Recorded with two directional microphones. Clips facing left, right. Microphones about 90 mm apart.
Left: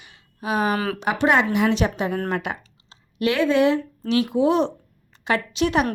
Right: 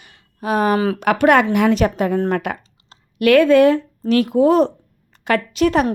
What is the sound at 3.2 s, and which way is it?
A woman's voice, 55° right (ahead or behind).